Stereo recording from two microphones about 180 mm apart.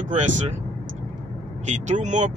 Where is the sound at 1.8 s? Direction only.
40° right (ahead or behind).